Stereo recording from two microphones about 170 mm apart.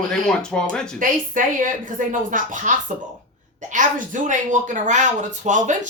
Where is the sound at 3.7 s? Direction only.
50° right (ahead or behind).